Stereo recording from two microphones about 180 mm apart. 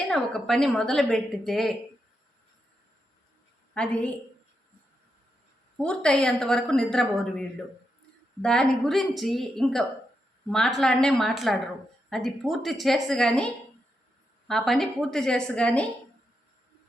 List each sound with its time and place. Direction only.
0.1 s a woman's voice: centre (ahead or behind)
3.8 s a woman's voice: 5° left (ahead or behind)
5.7 s a woman's voice: 5° left (ahead or behind)